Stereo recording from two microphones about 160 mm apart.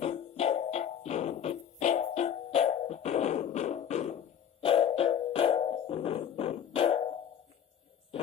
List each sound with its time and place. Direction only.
0.0 s music: 40° left (ahead or behind)